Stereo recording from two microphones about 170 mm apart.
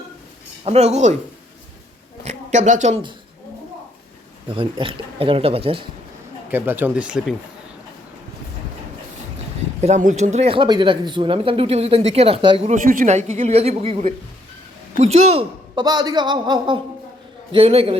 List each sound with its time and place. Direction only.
0.6 s speech: 40° right (ahead or behind)
2.2 s speech: 45° right (ahead or behind)
4.4 s speech: 30° right (ahead or behind)
6.5 s speech: 10° right (ahead or behind)
9.8 s speech: 45° right (ahead or behind)